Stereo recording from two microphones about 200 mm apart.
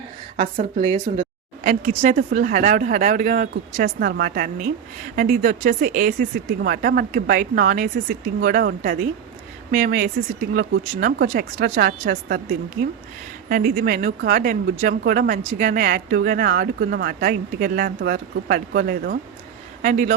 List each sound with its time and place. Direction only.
0.3 s a woman's voice: 40° right (ahead or behind)
1.2 s a woman's voice: 40° right (ahead or behind)
13.5 s a woman's voice: 50° right (ahead or behind)